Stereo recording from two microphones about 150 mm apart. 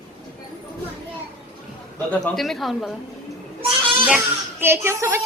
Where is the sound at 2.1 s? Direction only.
Centre (ahead or behind).